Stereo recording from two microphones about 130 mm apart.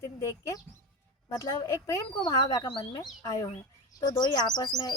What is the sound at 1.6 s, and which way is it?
Speech, 20° left (ahead or behind).